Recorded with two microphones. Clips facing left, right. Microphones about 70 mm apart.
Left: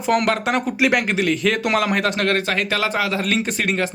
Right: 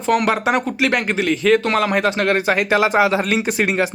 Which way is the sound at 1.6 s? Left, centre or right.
Centre.